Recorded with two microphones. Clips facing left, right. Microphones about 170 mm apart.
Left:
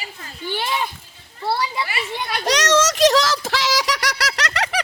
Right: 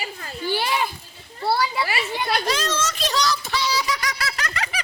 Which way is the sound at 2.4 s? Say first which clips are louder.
Left 6 dB; 80° left.